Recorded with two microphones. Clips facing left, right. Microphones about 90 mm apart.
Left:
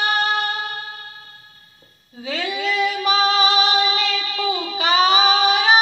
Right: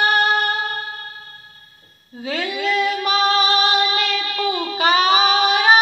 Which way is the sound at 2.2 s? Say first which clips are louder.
Right 1 dB; 45° right (ahead or behind).